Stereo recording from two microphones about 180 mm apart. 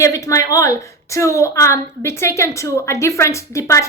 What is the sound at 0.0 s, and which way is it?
A woman's voice, 15° left (ahead or behind).